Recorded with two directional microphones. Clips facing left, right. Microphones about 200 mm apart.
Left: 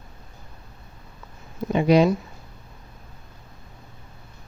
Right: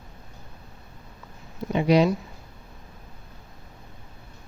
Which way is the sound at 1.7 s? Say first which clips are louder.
Left 2 dB; 50° left (ahead or behind).